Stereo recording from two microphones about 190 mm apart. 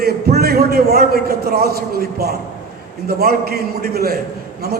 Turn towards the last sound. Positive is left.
turn(degrees=-55)  # may be behind; listen again after turning